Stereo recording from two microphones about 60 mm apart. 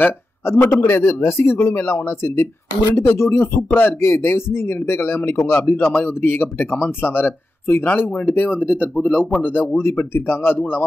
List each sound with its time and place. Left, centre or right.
0.5 s speech: left
3.3 s speech: left